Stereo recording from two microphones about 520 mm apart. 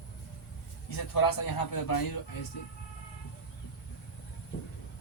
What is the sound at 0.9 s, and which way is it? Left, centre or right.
A man's voice, left.